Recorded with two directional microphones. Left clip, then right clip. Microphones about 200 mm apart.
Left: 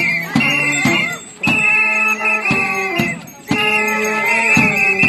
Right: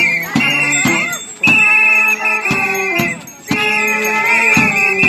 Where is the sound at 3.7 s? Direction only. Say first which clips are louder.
Right 2 dB; 15° left (ahead or behind).